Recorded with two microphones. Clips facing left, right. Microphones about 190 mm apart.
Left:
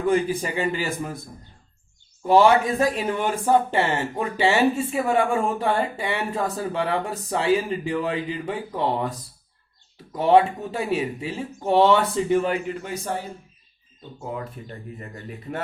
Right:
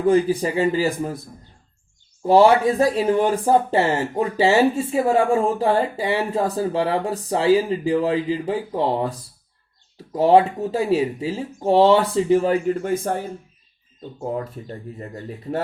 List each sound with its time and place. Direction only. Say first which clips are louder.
0.0 s speech: right 4 dB; 30° right (ahead or behind)
2.2 s speech: right 3 dB; 30° right (ahead or behind)
12.7 s a man's voice: right 6 dB; 50° right (ahead or behind)
14.2 s speech: right 5 dB; 40° right (ahead or behind)